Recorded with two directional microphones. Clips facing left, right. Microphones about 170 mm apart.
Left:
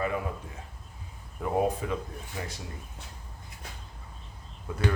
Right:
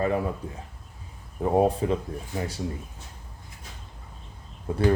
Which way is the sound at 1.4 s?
30° right (ahead or behind).